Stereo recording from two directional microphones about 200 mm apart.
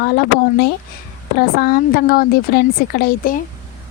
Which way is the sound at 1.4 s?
50° left (ahead or behind).